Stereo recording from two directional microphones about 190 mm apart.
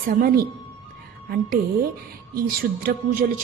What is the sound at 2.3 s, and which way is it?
Speech, 50° right (ahead or behind).